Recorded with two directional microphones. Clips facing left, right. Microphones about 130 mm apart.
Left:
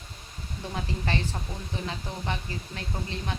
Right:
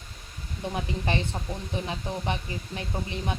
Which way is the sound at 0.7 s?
20° right (ahead or behind).